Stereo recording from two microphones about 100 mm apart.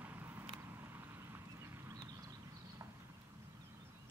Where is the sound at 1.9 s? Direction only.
40° right (ahead or behind).